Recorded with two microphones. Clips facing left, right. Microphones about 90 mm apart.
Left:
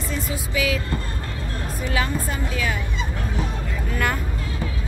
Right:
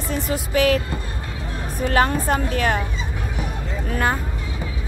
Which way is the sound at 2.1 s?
60° right (ahead or behind).